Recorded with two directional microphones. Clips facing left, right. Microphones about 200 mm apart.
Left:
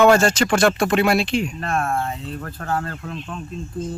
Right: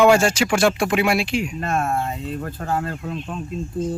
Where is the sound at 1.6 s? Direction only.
25° right (ahead or behind).